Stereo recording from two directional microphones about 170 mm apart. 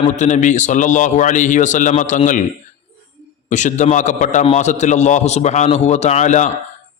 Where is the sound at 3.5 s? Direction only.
45° left (ahead or behind).